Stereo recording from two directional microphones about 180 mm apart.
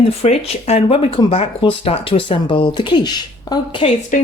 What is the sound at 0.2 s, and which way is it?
Speech, 35° left (ahead or behind).